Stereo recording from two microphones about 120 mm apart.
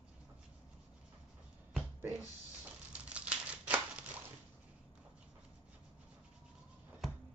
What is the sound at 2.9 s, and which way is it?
Scissors, 10° right (ahead or behind).